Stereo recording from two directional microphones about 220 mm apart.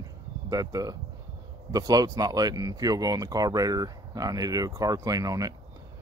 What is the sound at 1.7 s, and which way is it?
Speech, 15° right (ahead or behind).